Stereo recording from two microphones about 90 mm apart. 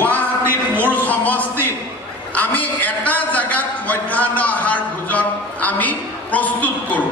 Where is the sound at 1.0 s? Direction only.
20° left (ahead or behind).